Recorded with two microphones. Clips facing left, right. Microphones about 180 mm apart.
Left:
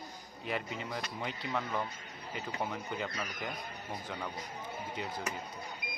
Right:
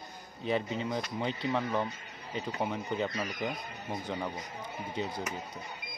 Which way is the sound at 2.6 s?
20° right (ahead or behind).